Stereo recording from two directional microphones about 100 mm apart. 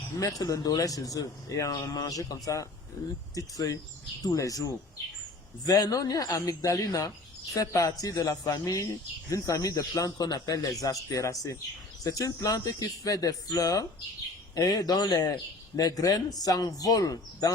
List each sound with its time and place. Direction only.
0.2 s speech: 35° left (ahead or behind)